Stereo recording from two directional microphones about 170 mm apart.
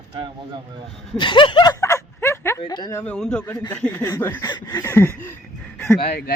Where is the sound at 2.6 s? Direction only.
25° left (ahead or behind).